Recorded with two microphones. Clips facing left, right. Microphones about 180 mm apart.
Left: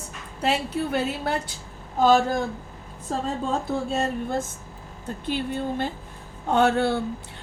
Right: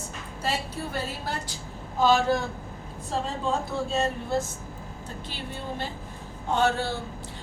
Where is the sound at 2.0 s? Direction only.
50° left (ahead or behind).